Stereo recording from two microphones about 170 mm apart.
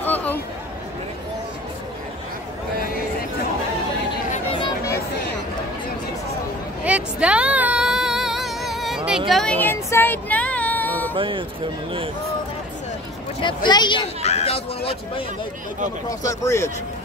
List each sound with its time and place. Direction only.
0.0 s a sound: 10° left (ahead or behind)
4.6 s chatter: 25° left (ahead or behind)
6.8 s a sound: 5° right (ahead or behind)
9.3 s child singing: 5° left (ahead or behind)
11.1 s speech: 30° right (ahead or behind)
13.7 s speech: 25° left (ahead or behind)
16.1 s speech: 20° left (ahead or behind)